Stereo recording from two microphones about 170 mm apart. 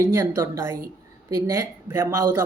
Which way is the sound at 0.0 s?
15° right (ahead or behind).